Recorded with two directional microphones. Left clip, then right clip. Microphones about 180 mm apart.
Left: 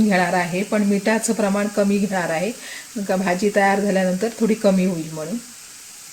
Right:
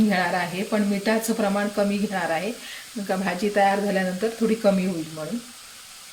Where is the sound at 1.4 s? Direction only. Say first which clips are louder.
Left 3 dB; 40° left (ahead or behind).